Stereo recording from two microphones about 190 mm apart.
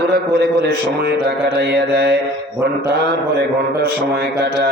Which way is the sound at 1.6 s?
60° right (ahead or behind).